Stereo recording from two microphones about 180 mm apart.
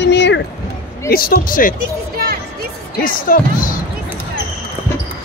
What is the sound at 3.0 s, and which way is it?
Speech, 50° left (ahead or behind).